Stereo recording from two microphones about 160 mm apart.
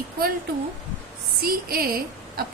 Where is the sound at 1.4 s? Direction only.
70° right (ahead or behind).